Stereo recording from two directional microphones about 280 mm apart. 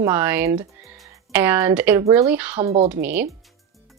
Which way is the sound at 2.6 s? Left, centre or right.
Right.